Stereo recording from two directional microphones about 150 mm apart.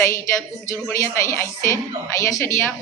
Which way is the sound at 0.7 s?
20° left (ahead or behind).